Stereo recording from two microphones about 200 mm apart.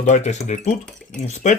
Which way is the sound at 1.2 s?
35° left (ahead or behind).